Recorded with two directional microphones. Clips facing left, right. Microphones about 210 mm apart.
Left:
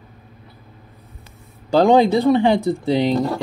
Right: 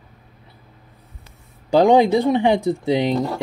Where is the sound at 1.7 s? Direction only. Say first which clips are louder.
Even; 15° right (ahead or behind).